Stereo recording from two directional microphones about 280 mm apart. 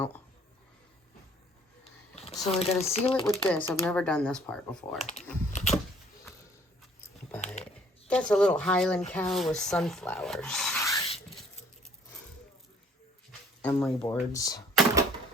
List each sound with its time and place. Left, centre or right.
2.1 s a sound: centre
3.1 s speech: centre
4.9 s typing: left
7.4 s a sound: left
8.0 s speech: centre; by 11.3 s left
13.6 s speech: centre